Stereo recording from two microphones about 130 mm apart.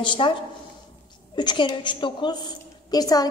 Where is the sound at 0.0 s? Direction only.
40° left (ahead or behind).